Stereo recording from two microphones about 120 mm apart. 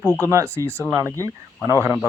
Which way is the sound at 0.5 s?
20° right (ahead or behind).